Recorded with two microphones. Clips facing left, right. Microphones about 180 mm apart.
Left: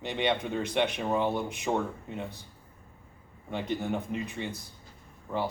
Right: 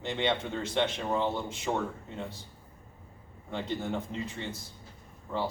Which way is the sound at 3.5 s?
15° left (ahead or behind).